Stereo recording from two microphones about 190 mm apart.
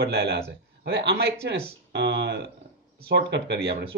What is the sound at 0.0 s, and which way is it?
A man's voice, 55° right (ahead or behind).